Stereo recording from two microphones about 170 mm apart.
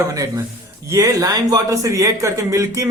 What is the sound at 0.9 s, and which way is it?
A man's voice, 20° right (ahead or behind).